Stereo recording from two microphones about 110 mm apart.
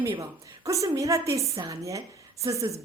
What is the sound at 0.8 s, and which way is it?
A woman's voice, 30° right (ahead or behind).